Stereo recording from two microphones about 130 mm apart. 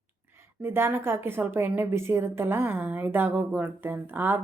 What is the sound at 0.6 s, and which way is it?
A woman's voice, 20° right (ahead or behind).